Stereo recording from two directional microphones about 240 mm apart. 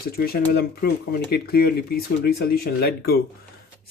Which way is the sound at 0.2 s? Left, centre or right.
Left.